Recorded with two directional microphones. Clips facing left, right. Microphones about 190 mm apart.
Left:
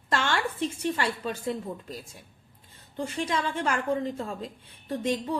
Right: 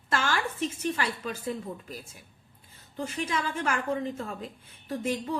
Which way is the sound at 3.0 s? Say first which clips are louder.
Left 2 dB; 30° left (ahead or behind).